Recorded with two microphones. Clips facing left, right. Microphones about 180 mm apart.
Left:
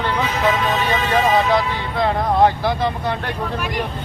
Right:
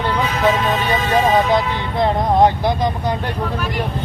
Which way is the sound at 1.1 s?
20° right (ahead or behind).